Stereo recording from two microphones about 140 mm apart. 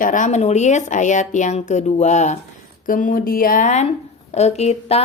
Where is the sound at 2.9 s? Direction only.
75° left (ahead or behind); by 5.0 s 50° left (ahead or behind).